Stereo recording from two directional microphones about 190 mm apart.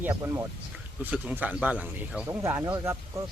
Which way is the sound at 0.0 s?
15° right (ahead or behind).